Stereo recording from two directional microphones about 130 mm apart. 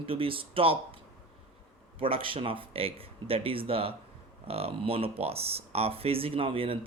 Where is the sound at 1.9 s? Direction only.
45° right (ahead or behind).